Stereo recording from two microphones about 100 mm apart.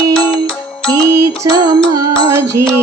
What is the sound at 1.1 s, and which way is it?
Music, 40° right (ahead or behind).